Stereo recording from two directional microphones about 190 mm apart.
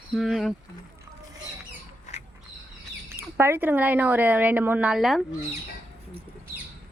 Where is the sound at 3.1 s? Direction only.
10° right (ahead or behind).